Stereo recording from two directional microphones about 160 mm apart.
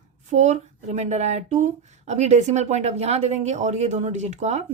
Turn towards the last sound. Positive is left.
turn(degrees=-45)  # may be behind; listen again after turning